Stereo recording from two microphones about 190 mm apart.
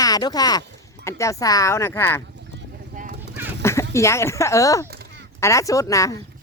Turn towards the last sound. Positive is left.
turn(degrees=15)  # may be behind; listen again after turning